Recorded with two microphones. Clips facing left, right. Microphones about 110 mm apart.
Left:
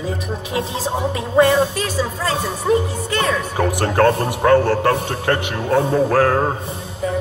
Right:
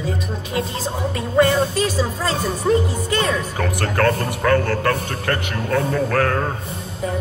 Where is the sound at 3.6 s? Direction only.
25° left (ahead or behind).